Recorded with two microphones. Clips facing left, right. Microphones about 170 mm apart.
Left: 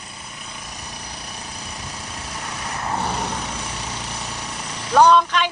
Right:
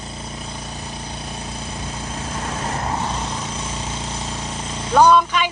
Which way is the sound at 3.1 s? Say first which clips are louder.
Even; 70° left (ahead or behind).